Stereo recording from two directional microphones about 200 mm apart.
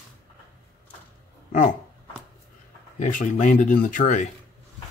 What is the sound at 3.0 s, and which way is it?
Speech, 40° left (ahead or behind).